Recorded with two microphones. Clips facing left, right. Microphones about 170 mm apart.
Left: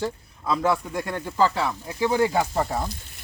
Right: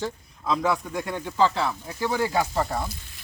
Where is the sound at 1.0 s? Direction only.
5° right (ahead or behind).